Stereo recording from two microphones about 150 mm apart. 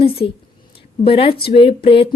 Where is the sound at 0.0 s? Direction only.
40° left (ahead or behind).